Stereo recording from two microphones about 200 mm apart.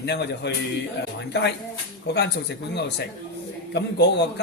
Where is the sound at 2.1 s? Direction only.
60° left (ahead or behind).